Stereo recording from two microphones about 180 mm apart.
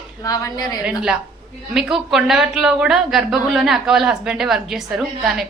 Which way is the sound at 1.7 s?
Centre (ahead or behind).